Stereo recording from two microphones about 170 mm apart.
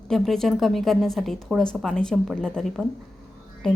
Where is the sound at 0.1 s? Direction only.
Centre (ahead or behind).